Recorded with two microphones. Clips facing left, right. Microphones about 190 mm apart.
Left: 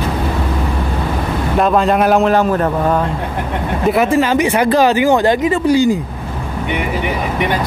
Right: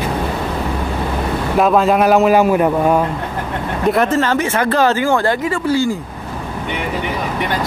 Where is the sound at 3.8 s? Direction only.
5° left (ahead or behind).